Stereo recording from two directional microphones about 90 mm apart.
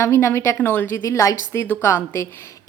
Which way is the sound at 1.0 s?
35° left (ahead or behind).